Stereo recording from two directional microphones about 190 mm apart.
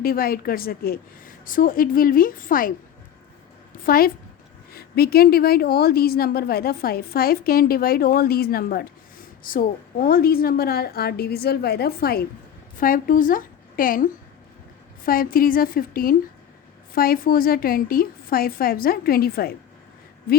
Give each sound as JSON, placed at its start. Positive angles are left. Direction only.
{"t": 0.0, "sound": "a woman's voice", "side_deg": 50}
{"t": 3.8, "sound": "a woman's voice", "side_deg": 50}